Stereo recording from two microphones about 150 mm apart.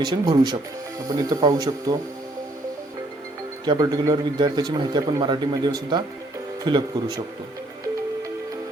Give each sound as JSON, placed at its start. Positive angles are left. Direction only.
{"t": 0.0, "sound": "a man's voice", "side_deg": -30}
{"t": 3.7, "sound": "a man's voice", "side_deg": -25}